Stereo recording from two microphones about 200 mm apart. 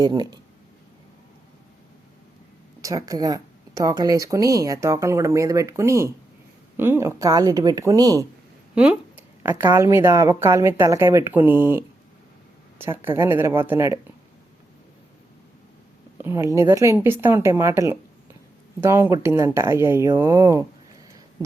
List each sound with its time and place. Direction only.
0.0 s speech: 20° right (ahead or behind)
2.8 s speech: 20° right (ahead or behind)
8.7 s speech: 5° right (ahead or behind)
16.1 s speech: 10° right (ahead or behind)